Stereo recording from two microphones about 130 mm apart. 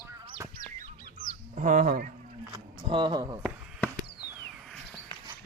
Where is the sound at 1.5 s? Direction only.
90° right.